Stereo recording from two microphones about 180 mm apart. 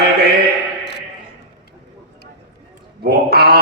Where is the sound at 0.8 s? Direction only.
70° left (ahead or behind).